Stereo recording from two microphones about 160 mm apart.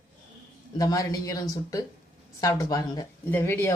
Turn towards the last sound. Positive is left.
turn(degrees=15)  # may be behind; listen again after turning